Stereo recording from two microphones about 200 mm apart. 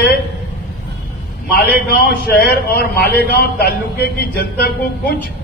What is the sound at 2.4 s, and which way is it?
A man's voice, 50° left (ahead or behind).